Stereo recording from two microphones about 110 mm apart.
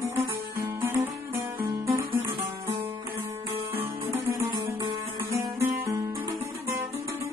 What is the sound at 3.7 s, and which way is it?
Music, 20° right (ahead or behind).